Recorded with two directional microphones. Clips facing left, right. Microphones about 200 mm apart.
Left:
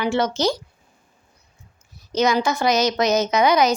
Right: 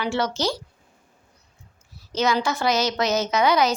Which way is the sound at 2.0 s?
15° left (ahead or behind).